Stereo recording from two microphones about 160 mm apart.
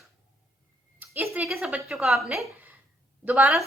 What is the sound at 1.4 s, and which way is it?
A woman's voice, centre (ahead or behind).